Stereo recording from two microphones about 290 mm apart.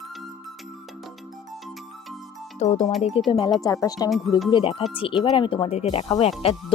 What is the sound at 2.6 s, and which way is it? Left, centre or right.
Speech, left.